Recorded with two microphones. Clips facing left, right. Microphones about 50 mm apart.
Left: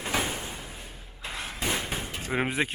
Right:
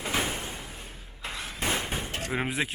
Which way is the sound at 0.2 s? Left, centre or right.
Centre.